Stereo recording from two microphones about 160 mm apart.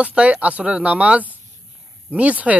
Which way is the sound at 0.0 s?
5° right (ahead or behind).